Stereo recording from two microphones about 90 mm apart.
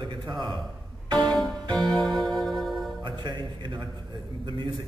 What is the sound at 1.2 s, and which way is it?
Music, 5° left (ahead or behind).